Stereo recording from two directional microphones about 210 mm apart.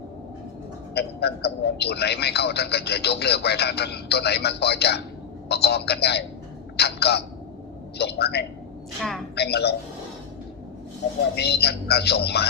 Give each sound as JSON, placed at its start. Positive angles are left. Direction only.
{"t": 0.9, "sound": "a man's voice", "side_deg": 50}
{"t": 9.0, "sound": "a woman's voice", "side_deg": 0}
{"t": 9.3, "sound": "a man's voice", "side_deg": 50}
{"t": 11.3, "sound": "a man's voice", "side_deg": 50}